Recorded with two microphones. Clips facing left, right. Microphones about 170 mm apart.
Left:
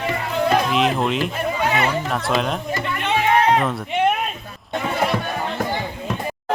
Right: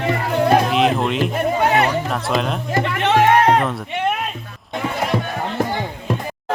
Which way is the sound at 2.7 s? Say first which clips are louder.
Right 9 dB; 75° right (ahead or behind).